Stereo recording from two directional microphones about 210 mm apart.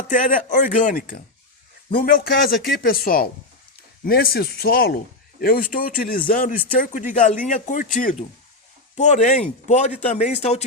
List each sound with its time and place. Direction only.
0.1 s speech: 40° left (ahead or behind)